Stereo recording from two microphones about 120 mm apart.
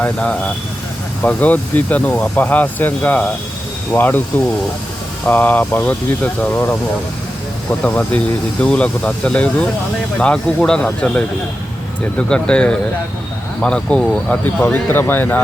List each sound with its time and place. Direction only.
0.0 s speech: 10° left (ahead or behind)
5.2 s speech: 15° left (ahead or behind)